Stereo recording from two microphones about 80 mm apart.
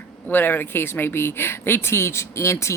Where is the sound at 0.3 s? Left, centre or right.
Left.